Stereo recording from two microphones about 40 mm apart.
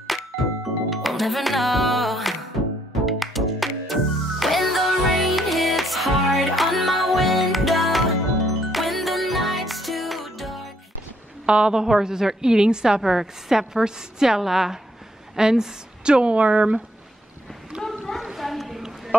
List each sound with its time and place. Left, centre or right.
0.1 s music: centre
11.4 s a woman's voice: right
11.7 s a woman's voice: centre; by 16.8 s right
18.2 s a sound: centre